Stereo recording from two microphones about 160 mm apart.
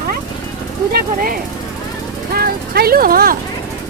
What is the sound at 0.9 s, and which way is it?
Speech, 65° right (ahead or behind).